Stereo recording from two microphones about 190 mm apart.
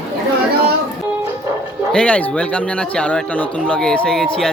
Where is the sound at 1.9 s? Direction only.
5° left (ahead or behind).